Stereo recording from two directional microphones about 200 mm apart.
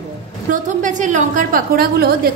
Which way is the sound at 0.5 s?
40° right (ahead or behind).